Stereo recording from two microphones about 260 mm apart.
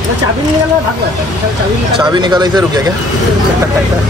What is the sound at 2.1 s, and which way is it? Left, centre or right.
Speech, centre.